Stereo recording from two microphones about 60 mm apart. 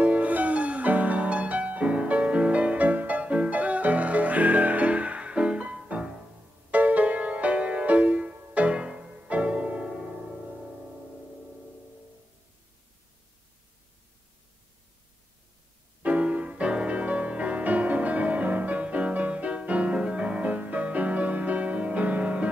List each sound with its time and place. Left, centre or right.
0.0 s music: right
16.0 s music: right